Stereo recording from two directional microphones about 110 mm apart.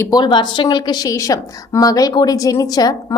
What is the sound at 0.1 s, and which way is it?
A woman's voice, 40° left (ahead or behind).